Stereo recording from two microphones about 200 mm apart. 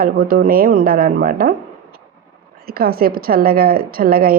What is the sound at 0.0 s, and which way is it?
A woman's voice, 50° right (ahead or behind).